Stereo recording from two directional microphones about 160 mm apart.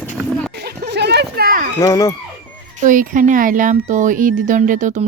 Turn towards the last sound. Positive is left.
turn(degrees=-50)  # may be behind; listen again after turning